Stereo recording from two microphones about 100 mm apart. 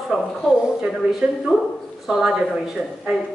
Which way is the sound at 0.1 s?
Centre (ahead or behind).